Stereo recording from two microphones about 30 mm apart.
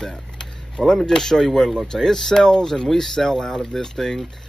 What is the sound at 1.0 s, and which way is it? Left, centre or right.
Speech, centre.